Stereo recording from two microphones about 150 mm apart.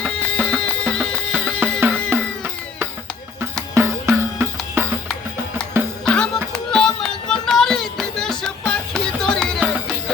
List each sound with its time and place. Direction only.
0.0 s music: 5° left (ahead or behind)
3.8 s music: 15° right (ahead or behind)
6.1 s music: 5° left (ahead or behind)